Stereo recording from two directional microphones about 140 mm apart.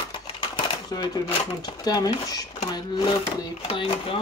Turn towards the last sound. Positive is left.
turn(degrees=40)  # may be behind; listen again after turning